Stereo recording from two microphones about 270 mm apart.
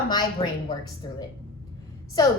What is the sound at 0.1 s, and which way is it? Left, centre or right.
A woman's voice, centre.